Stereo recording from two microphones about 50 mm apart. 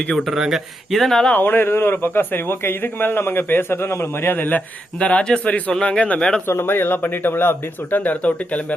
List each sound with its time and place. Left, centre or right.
0.2 s speech: centre
1.3 s a man's voice: left
4.9 s a man's voice: left
6.5 s a man's voice: left